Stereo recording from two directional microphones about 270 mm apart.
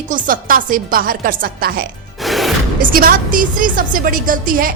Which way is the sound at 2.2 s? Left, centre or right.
Centre.